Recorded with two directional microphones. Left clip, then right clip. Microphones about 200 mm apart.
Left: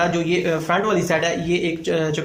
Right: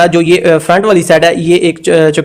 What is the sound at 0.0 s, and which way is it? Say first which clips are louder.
A man's voice: right 13 dB; 50° right (ahead or behind).